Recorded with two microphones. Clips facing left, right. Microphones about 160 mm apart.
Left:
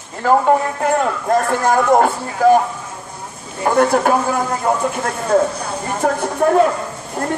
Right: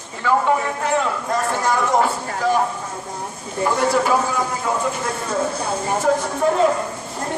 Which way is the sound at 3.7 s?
50° left (ahead or behind).